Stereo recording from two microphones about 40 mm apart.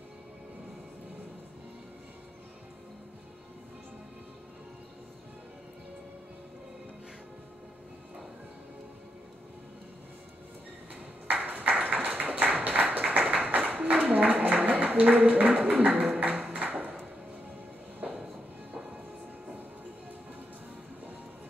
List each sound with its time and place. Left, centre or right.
11.4 s a sound: right
14.0 s music: right
18.0 s music: right